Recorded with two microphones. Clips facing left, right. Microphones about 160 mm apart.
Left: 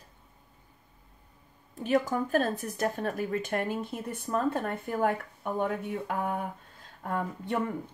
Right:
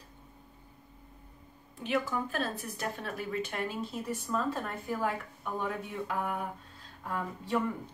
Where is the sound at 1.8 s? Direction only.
45° left (ahead or behind).